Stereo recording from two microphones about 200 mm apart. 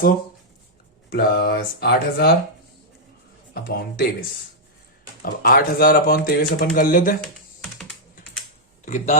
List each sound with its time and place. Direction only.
1.1 s speech: 55° left (ahead or behind)
3.5 s speech: 50° left (ahead or behind)
5.2 s speech: 45° left (ahead or behind)
8.8 s a man's voice: 35° left (ahead or behind)